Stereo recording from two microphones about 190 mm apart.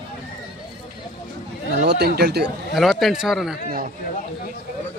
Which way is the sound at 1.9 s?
60° right (ahead or behind).